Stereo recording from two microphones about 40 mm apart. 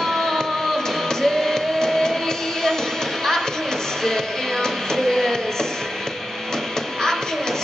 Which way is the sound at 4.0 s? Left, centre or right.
Centre.